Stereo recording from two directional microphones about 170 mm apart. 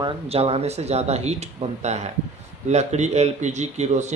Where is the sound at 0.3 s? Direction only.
35° right (ahead or behind).